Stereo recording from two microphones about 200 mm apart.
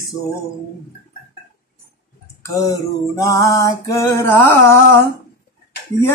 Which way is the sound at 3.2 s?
15° left (ahead or behind).